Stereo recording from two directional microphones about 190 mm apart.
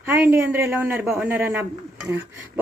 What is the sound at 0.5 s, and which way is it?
Speech, 10° right (ahead or behind).